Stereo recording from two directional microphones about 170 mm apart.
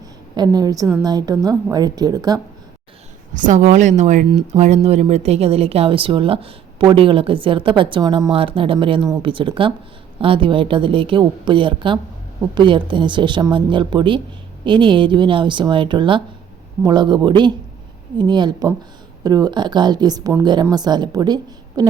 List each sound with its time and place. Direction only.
0.3 s a woman's voice: 25° right (ahead or behind)
3.3 s a woman's voice: 45° right (ahead or behind); by 21.8 s 25° right (ahead or behind)